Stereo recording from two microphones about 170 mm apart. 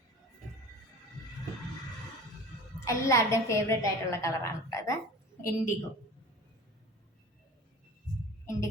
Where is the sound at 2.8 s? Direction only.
15° left (ahead or behind).